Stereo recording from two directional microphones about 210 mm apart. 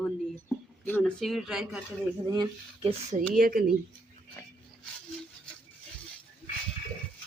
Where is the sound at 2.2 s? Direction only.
20° right (ahead or behind).